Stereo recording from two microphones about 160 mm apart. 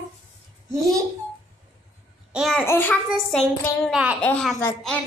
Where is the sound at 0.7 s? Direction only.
20° right (ahead or behind).